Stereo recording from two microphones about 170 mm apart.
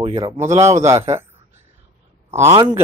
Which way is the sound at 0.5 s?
15° right (ahead or behind).